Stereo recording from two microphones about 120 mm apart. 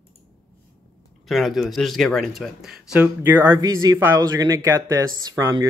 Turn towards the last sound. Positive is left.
turn(degrees=-30)  # may be behind; listen again after turning